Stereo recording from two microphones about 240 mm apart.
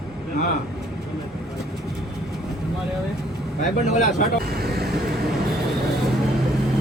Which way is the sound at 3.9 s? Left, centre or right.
Left.